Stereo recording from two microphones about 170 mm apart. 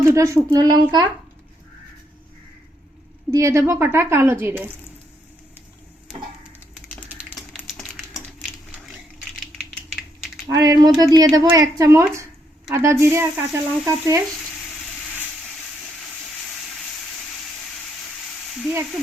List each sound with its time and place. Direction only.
0.0 s speech: 15° right (ahead or behind)
3.3 s speech: 20° right (ahead or behind)
7.1 s a sound: 10° right (ahead or behind)
7.5 s a sound: centre (ahead or behind)
10.5 s speech: 20° right (ahead or behind)
18.6 s speech: 10° right (ahead or behind)